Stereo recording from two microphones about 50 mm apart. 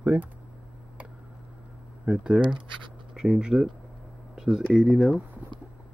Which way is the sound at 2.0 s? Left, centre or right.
Centre.